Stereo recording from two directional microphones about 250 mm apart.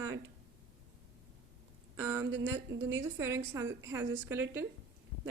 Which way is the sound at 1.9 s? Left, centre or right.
Centre.